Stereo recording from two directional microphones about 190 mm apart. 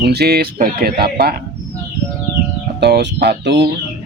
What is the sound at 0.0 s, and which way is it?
Speech, 60° right (ahead or behind).